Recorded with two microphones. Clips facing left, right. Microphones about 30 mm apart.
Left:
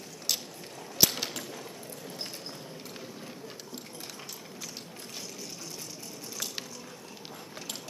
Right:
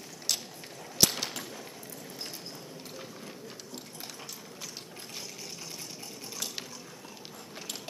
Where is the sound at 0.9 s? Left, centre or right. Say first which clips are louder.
Even; centre.